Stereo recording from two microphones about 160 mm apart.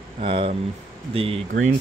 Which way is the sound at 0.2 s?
35° right (ahead or behind).